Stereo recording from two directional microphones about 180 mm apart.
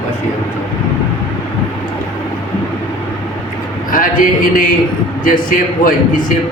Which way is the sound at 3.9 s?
50° left (ahead or behind).